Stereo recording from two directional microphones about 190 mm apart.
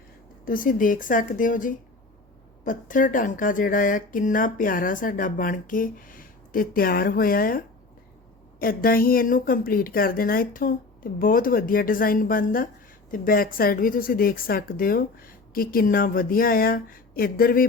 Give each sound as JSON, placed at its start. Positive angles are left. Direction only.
{"t": 0.4, "sound": "speech", "side_deg": 45}